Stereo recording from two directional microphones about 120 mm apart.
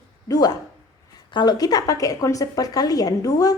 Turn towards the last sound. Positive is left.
turn(degrees=30)  # may be behind; listen again after turning